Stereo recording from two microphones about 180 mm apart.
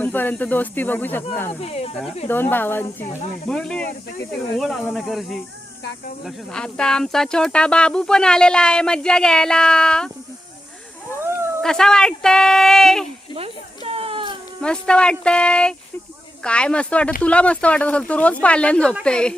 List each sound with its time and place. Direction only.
0.0 s speech: 10° left (ahead or behind)
1.6 s speech: 35° left (ahead or behind)
2.2 s speech: 10° left (ahead or behind)
11.6 s speech: 5° left (ahead or behind)
13.3 s a sound: 30° right (ahead or behind)
14.6 s speech: 5° left (ahead or behind)